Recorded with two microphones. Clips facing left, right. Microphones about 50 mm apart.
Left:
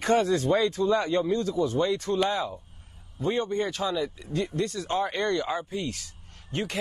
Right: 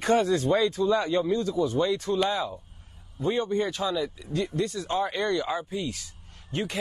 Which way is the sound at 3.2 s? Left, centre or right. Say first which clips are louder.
Right 1 dB; left.